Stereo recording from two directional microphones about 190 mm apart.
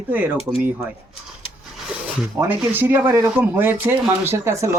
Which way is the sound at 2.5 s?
10° right (ahead or behind).